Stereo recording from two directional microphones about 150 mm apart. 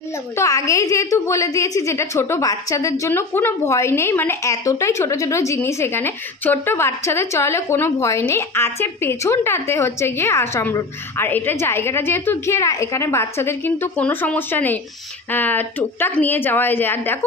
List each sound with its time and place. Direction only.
0.4 s a woman's voice: 20° left (ahead or behind)